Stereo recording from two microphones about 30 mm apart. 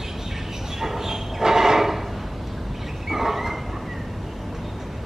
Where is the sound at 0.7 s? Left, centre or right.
Centre.